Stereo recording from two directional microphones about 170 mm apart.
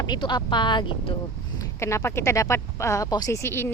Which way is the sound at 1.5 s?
15° left (ahead or behind).